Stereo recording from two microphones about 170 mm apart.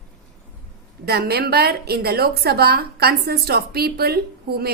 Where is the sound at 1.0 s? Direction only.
65° right (ahead or behind).